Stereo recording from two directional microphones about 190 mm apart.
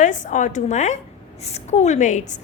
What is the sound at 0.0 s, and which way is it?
A woman's voice, 40° left (ahead or behind).